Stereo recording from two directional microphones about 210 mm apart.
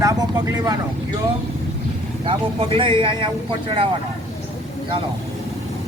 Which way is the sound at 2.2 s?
25° right (ahead or behind).